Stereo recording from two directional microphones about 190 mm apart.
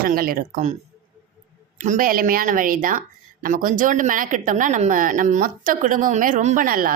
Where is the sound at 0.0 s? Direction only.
50° right (ahead or behind).